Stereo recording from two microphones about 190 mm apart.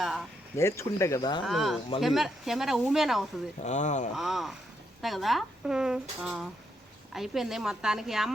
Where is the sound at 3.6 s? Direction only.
40° left (ahead or behind).